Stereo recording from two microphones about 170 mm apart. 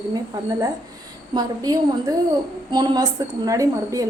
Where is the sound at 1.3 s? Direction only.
20° right (ahead or behind).